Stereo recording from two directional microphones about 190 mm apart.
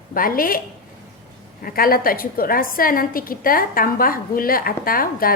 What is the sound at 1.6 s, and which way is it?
A woman's voice, 50° left (ahead or behind).